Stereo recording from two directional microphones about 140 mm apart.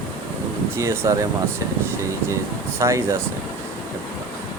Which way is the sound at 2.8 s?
20° right (ahead or behind).